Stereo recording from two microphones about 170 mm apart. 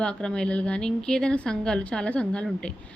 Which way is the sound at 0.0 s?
5° left (ahead or behind).